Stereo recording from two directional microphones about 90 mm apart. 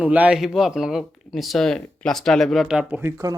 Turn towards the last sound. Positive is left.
turn(degrees=-25)  # may be behind; listen again after turning